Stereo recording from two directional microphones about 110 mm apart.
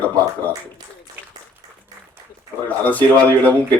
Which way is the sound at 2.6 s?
15° left (ahead or behind).